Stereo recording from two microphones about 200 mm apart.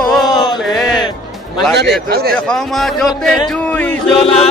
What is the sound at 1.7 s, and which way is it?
Speech, 55° right (ahead or behind).